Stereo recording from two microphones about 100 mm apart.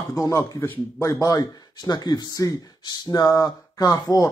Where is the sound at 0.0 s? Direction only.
35° left (ahead or behind).